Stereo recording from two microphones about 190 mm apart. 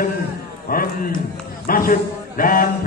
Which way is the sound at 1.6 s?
50° left (ahead or behind).